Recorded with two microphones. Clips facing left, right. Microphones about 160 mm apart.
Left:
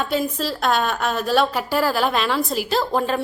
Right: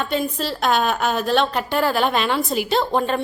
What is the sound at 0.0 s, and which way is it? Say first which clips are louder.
A woman's voice: even; 5° left (ahead or behind).